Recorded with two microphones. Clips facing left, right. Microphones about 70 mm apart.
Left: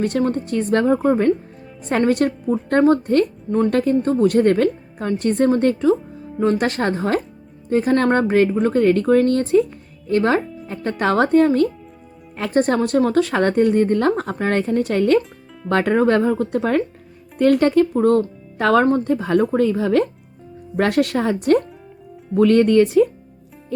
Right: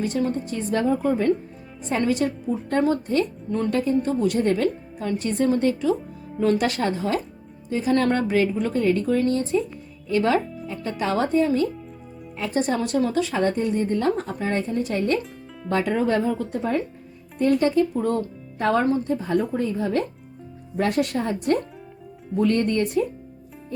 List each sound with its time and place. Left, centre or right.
0.0 s a woman's voice: left
10.1 s a woman's voice: left
15.7 s speech: left
18.5 s speech: left
18.9 s speech: left
20.7 s speech: left